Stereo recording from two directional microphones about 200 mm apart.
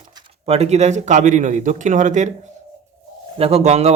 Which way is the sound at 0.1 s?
25° right (ahead or behind).